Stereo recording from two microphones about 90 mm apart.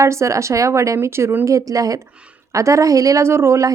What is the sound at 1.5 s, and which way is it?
A woman's voice, 35° right (ahead or behind).